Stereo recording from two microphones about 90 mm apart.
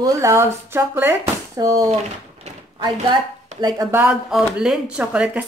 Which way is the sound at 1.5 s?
40° right (ahead or behind).